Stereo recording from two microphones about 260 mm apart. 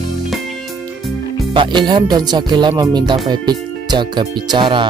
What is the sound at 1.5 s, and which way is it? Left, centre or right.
Speech, centre.